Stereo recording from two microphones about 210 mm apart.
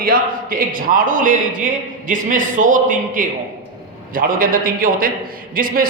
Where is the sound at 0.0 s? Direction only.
40° right (ahead or behind).